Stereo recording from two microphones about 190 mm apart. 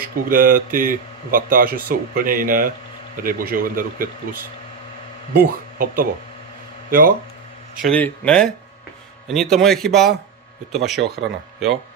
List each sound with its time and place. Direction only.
0.3 s speech: 45° right (ahead or behind)
5.3 s speech: 50° right (ahead or behind)
7.8 s a man's voice: 5° left (ahead or behind)